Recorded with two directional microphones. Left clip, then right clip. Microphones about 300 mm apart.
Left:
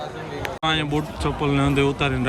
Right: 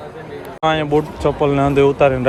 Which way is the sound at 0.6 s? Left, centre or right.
Centre.